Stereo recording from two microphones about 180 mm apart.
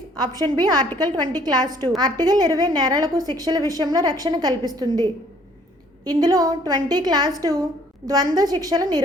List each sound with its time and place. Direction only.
0.2 s a woman's voice: 25° right (ahead or behind)